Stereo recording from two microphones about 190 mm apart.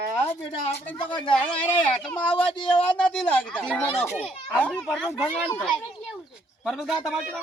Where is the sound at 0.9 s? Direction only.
25° left (ahead or behind).